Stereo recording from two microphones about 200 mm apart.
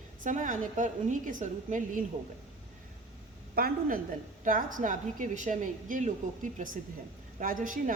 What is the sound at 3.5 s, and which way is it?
A woman's voice, 45° right (ahead or behind).